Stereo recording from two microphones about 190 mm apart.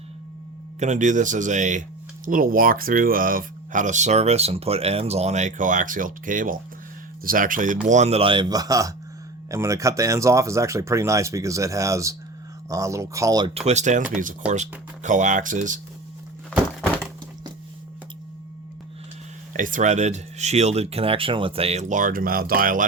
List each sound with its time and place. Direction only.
0.8 s speech: 40° right (ahead or behind)
16.8 s thunk: 5° left (ahead or behind)
19.5 s speech: 45° right (ahead or behind)